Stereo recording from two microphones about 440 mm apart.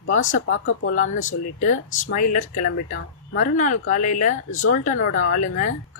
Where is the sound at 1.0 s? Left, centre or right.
Centre.